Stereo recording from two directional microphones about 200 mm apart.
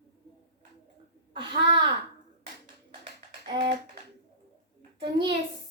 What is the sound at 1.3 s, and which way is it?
Speech, 25° right (ahead or behind).